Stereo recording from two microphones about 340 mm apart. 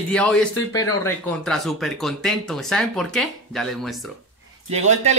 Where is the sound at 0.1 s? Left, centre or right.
Centre.